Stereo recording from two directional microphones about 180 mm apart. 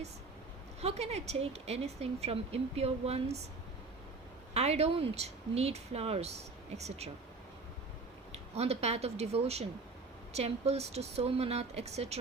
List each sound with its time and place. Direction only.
0.8 s speech: 35° right (ahead or behind)
4.5 s speech: 35° right (ahead or behind)
8.3 s speech: 35° right (ahead or behind)